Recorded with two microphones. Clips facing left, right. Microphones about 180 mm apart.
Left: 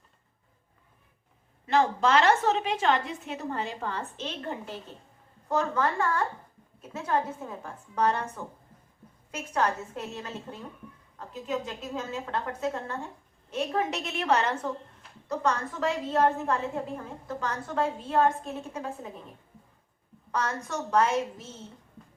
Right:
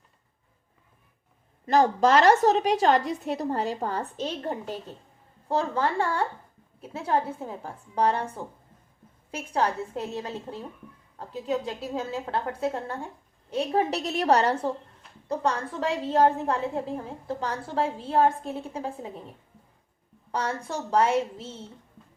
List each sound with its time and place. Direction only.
1.6 s a woman's voice: 40° right (ahead or behind)
20.3 s a woman's voice: 30° right (ahead or behind)